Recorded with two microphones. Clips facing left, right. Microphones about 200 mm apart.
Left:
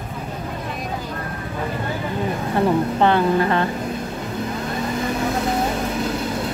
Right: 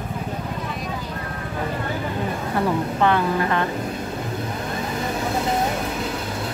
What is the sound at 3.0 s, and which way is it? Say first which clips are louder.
Speech: left 2 dB; 30° left (ahead or behind).